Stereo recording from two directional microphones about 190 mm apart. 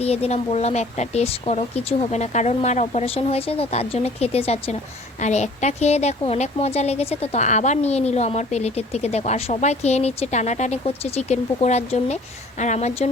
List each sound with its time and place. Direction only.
0.0 s a woman's voice: 35° left (ahead or behind)